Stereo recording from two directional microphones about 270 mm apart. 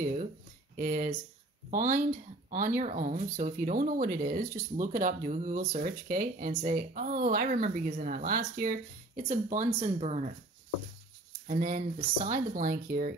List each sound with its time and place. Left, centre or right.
0.0 s a sound: right
0.7 s speech: right
11.4 s speech: right